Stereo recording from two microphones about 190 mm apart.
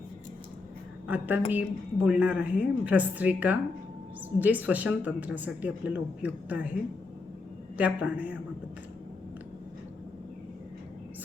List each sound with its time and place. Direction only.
1.0 s speech: 10° right (ahead or behind)
7.8 s speech: 5° right (ahead or behind)